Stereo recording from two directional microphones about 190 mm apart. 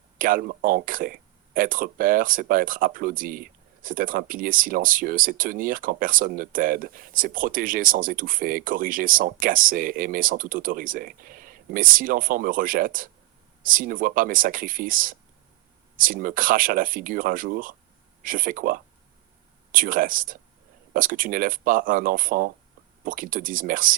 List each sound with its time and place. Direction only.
0.2 s speech: 45° right (ahead or behind)